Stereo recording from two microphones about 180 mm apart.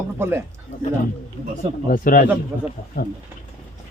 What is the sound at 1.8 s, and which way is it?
Speech, 50° left (ahead or behind).